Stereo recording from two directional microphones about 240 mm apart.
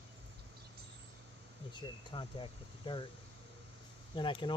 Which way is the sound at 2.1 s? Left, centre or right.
Centre.